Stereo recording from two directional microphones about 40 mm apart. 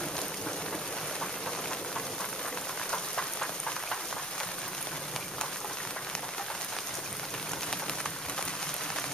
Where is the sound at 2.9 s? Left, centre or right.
Centre.